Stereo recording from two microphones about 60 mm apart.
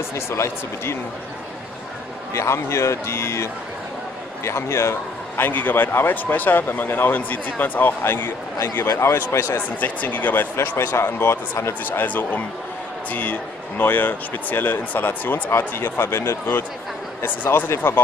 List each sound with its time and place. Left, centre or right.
0.1 s a man's voice: left
2.3 s a man's voice: left
4.5 s a man's voice: left
5.4 s speech: left
8.7 s a man's voice: left
9.8 s a man's voice: left
12.1 s a man's voice: left
15.8 s a man's voice: left
17.2 s speech: left